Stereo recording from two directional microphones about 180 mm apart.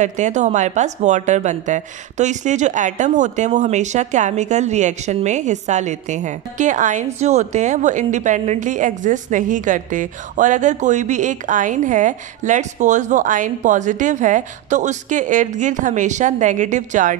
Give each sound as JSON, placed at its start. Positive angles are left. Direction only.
{"t": 0.0, "sound": "a woman's voice", "side_deg": -40}